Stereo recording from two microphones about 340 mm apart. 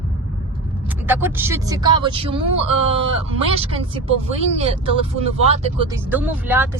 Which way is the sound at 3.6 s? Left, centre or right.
Centre.